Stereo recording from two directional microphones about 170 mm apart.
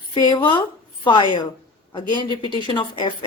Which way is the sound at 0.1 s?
25° left (ahead or behind).